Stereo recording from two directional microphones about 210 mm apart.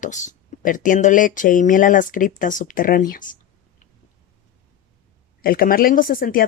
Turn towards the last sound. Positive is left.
turn(degrees=40)  # may be behind; listen again after turning